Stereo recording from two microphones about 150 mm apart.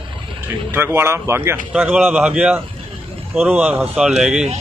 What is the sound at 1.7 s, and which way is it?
Speech, 5° right (ahead or behind).